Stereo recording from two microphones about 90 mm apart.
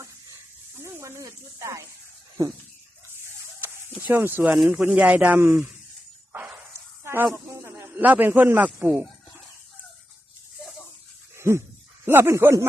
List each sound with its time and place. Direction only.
0.8 s speech: 35° right (ahead or behind)
3.6 s a sound: 25° right (ahead or behind)
4.7 s speech: 15° right (ahead or behind)
5.4 s a man's voice: 25° right (ahead or behind)
6.3 s snake: 30° right (ahead or behind)
7.9 s a man's voice: 20° right (ahead or behind)
11.3 s dog: 30° right (ahead or behind)
12.0 s a man's voice: 25° right (ahead or behind)